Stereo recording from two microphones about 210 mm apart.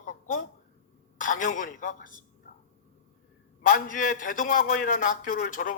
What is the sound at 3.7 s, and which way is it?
A man's voice, 40° left (ahead or behind).